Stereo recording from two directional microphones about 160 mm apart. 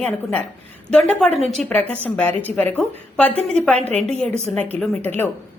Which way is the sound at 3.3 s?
40° right (ahead or behind).